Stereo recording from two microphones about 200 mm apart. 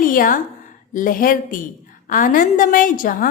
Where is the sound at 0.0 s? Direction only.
45° left (ahead or behind).